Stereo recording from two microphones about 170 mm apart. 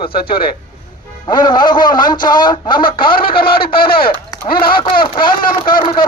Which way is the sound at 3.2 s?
60° left (ahead or behind).